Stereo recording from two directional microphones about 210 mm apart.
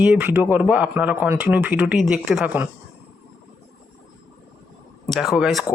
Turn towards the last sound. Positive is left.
turn(degrees=0)  # may be behind; listen again after turning